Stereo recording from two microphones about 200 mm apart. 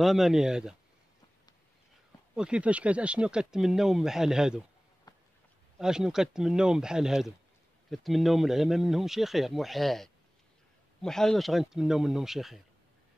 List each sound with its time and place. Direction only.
0.0 s speech: centre (ahead or behind)
2.3 s speech: 5° right (ahead or behind)
5.1 s a sound: 20° left (ahead or behind)
5.8 s speech: 5° right (ahead or behind)